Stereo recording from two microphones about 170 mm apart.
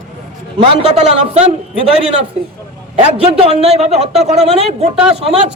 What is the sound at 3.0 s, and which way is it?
A woman's voice, 35° right (ahead or behind).